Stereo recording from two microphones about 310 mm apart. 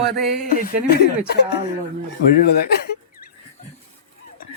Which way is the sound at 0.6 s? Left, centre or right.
Left.